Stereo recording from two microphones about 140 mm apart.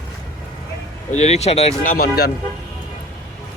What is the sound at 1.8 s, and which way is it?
Speech, 90° left.